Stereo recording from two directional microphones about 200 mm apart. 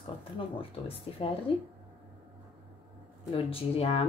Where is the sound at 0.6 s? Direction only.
30° left (ahead or behind).